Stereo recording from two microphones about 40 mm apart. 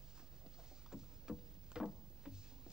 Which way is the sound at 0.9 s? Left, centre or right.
Centre.